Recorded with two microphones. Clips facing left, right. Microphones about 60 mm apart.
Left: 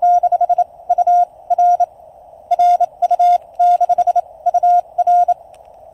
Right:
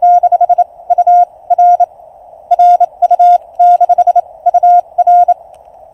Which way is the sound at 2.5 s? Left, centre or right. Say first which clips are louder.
Right 6 dB; right.